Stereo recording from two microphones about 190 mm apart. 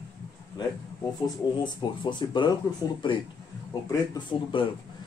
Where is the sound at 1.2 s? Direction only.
25° left (ahead or behind).